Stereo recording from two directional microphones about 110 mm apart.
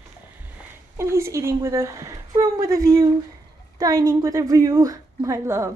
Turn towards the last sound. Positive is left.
turn(degrees=-25)  # may be behind; listen again after turning